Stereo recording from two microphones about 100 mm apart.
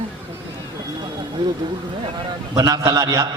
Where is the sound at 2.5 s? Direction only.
35° right (ahead or behind).